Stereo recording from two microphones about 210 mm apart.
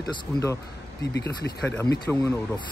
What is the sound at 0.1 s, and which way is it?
Speech, 15° left (ahead or behind).